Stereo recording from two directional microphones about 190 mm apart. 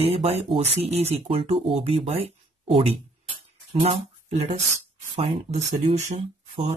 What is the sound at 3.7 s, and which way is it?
Speech, 35° right (ahead or behind).